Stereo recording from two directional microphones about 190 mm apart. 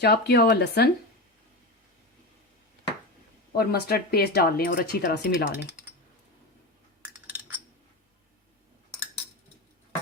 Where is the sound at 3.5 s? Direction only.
55° left (ahead or behind).